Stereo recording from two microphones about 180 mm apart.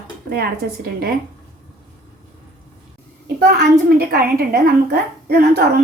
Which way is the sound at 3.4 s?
65° right (ahead or behind).